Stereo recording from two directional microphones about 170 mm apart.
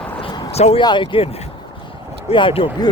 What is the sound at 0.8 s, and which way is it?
Speech, 25° left (ahead or behind).